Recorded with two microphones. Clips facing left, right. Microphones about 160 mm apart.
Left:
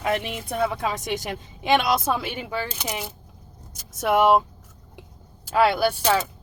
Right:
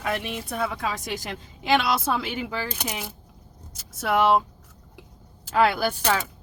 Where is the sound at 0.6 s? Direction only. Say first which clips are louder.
Left 5 dB; 25° left (ahead or behind).